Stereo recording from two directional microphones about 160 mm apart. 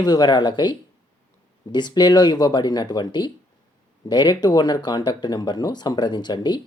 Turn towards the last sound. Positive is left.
turn(degrees=30)  # may be behind; listen again after turning